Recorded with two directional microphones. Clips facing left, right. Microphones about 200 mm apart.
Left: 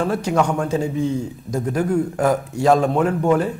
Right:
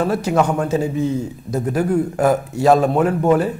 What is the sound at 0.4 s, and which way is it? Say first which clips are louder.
Speech: right 2 dB; 20° right (ahead or behind).